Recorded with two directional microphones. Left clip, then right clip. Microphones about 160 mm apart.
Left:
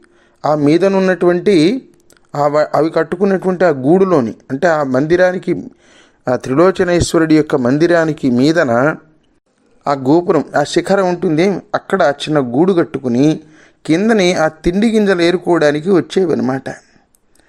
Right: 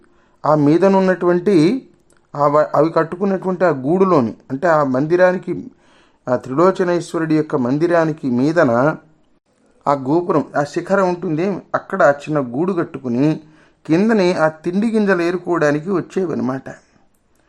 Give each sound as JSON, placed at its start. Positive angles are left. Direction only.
{"t": 0.4, "sound": "speech", "side_deg": 15}
{"t": 10.0, "sound": "speech", "side_deg": 20}